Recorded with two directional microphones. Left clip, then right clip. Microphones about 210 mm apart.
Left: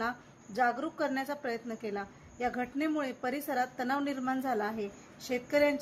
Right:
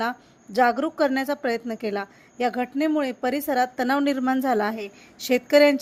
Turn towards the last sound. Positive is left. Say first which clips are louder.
# right 11 dB
turn(degrees=-40)  # may be behind; listen again after turning